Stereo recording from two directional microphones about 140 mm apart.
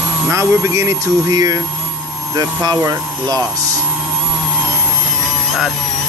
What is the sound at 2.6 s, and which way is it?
Speech, 25° right (ahead or behind).